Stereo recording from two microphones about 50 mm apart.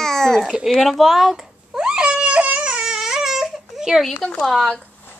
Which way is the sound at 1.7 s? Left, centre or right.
Centre.